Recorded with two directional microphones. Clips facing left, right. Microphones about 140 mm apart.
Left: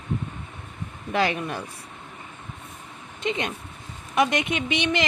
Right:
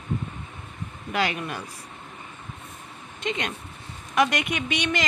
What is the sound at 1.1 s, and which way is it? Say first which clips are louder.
Speech: left 3 dB; 30° left (ahead or behind).